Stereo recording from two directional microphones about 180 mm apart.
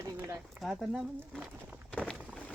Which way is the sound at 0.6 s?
Centre (ahead or behind).